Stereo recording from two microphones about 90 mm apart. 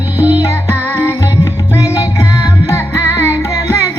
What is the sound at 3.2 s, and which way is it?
Music, 30° left (ahead or behind).